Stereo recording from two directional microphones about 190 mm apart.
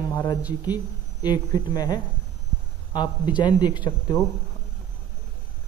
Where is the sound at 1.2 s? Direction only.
20° left (ahead or behind).